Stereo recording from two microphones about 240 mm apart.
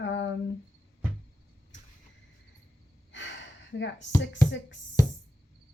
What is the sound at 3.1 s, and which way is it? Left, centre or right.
Gasp, left.